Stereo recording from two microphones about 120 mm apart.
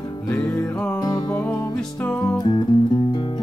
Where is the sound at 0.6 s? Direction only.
5° left (ahead or behind).